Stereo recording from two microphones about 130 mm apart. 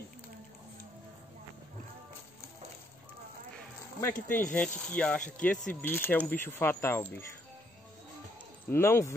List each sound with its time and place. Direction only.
4.0 s speech: 15° left (ahead or behind)
8.6 s speech: 20° left (ahead or behind)